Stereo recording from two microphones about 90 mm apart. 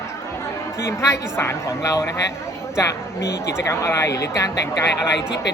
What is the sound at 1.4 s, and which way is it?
Speech, 30° left (ahead or behind).